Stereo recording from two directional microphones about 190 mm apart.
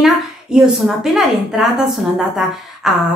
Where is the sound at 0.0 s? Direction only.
Centre (ahead or behind).